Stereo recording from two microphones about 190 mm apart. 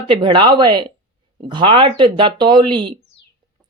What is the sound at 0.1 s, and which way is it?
Speech, 25° right (ahead or behind).